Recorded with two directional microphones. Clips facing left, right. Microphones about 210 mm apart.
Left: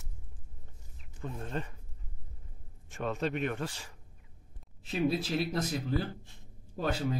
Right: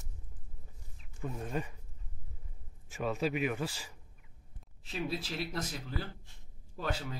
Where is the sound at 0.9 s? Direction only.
10° right (ahead or behind).